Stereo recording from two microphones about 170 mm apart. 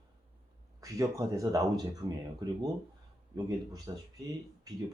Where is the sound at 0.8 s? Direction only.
20° right (ahead or behind).